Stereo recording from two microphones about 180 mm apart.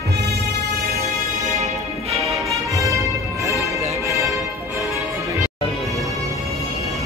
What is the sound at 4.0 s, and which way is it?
Music, 15° right (ahead or behind).